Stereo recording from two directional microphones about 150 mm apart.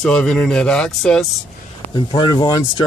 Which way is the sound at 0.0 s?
5° left (ahead or behind).